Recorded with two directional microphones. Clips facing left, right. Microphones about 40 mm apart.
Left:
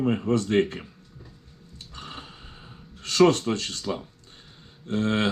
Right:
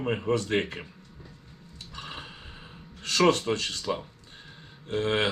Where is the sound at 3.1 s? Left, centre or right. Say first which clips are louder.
Left 3 dB; right.